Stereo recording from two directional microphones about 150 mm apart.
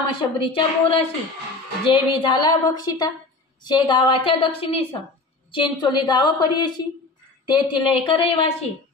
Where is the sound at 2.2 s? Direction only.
30° left (ahead or behind).